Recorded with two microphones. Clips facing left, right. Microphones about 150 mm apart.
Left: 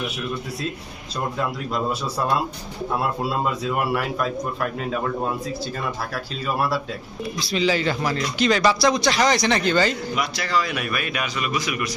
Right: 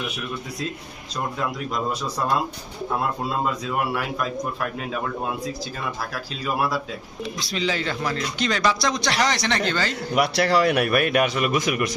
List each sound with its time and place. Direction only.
1.7 s a man's voice: 5° left (ahead or behind)
6.1 s a man's voice: centre (ahead or behind)
10.2 s a man's voice: 65° right (ahead or behind); by 11.9 s 50° right (ahead or behind)